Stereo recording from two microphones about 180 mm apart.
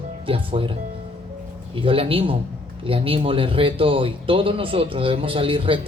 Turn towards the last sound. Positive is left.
turn(degrees=-30)  # may be behind; listen again after turning